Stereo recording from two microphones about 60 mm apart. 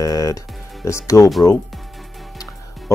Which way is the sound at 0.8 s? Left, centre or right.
Left.